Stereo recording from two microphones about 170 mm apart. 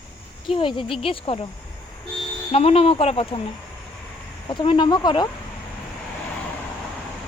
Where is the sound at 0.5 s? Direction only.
30° left (ahead or behind).